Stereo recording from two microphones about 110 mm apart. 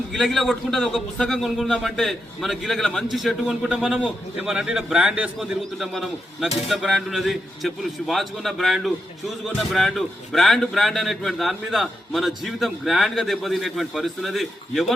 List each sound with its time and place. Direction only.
0.1 s a man's voice: centre (ahead or behind)